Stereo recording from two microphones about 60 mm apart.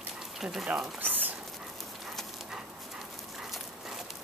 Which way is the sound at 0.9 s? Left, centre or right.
Right.